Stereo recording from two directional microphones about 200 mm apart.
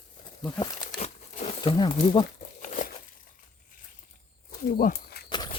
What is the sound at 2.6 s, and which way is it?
Crumpling, 40° left (ahead or behind).